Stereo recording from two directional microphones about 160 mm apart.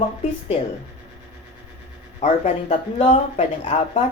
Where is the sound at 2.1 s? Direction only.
45° left (ahead or behind).